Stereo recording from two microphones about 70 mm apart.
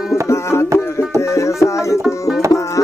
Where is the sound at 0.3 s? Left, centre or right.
Left.